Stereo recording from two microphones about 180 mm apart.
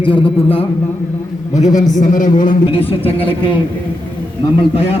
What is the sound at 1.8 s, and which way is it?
Speech, 45° left (ahead or behind).